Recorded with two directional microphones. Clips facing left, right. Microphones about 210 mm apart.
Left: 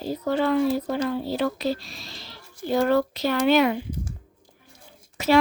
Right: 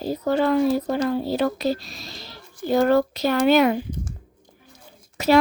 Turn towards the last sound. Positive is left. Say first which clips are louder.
# right 3 dB
turn(degrees=-40)  # may be behind; listen again after turning